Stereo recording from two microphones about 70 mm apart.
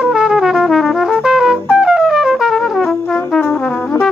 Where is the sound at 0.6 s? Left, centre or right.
Centre.